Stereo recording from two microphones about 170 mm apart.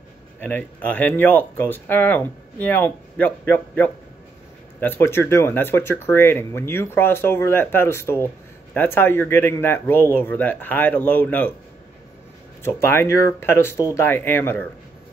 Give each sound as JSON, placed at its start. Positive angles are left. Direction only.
{"t": 0.4, "sound": "speech", "side_deg": 10}
{"t": 12.6, "sound": "speech", "side_deg": 15}